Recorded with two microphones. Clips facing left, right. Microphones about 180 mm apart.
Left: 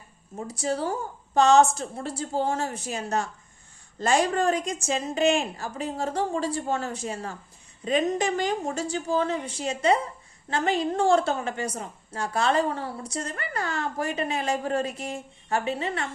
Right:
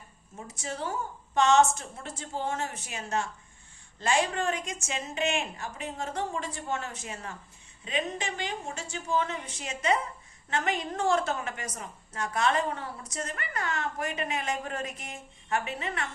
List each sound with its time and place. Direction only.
0.3 s a woman's voice: 35° left (ahead or behind)